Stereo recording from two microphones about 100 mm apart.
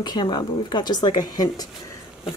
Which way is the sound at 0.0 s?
45° left (ahead or behind).